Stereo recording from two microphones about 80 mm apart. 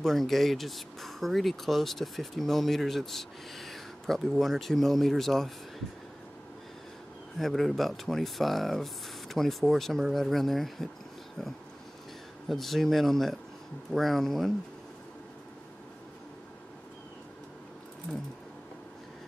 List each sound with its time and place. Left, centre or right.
0.0 s speech: centre
7.3 s speech: centre
12.4 s speech: centre